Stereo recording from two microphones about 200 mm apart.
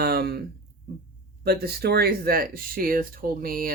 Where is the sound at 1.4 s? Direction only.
50° right (ahead or behind).